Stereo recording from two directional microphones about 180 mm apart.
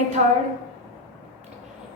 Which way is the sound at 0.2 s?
45° right (ahead or behind).